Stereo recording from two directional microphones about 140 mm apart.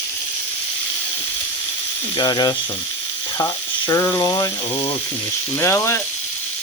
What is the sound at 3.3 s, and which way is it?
Frying, 30° left (ahead or behind).